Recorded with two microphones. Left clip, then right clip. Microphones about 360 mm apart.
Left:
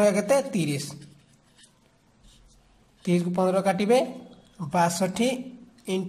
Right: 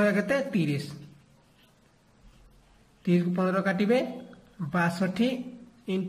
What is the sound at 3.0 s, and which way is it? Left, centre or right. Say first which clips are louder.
A man's voice: left 3 dB; centre.